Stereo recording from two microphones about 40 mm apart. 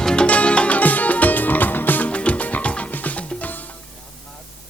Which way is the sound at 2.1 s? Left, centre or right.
Left.